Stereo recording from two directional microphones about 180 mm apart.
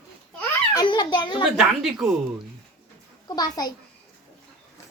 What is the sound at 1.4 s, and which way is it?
Speech, 5° right (ahead or behind).